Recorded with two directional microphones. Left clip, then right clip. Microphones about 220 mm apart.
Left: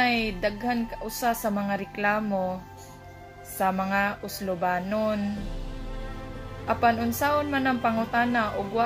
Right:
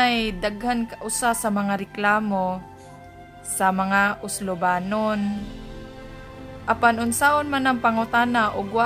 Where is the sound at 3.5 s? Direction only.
30° right (ahead or behind).